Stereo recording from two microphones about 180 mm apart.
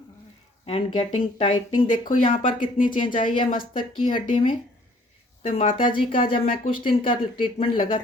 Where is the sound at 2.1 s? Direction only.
50° left (ahead or behind).